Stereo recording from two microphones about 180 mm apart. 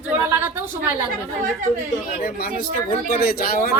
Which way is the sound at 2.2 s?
55° left (ahead or behind).